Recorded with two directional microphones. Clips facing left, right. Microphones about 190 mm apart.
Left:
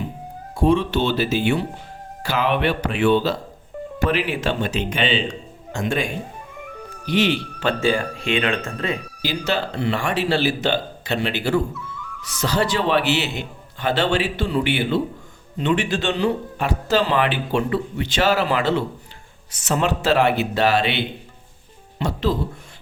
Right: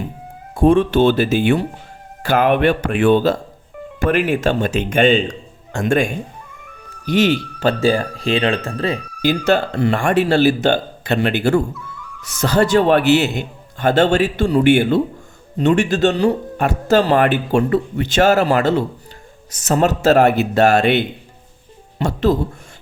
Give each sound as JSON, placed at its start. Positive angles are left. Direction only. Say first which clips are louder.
{"t": 0.5, "sound": "speech", "louder": "right 5 dB", "side_deg": -50}
{"t": 9.2, "sound": "speech", "louder": "right 8 dB", "side_deg": -50}